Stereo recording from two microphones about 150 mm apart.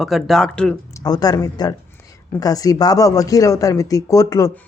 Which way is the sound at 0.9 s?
25° left (ahead or behind).